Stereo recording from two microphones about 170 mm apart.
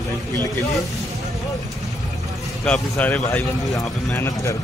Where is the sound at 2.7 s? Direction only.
10° left (ahead or behind).